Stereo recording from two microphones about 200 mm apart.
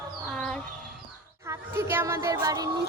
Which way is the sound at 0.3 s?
Centre (ahead or behind).